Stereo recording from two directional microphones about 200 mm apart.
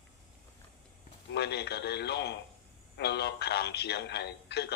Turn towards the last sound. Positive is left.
turn(degrees=55)  # may be behind; listen again after turning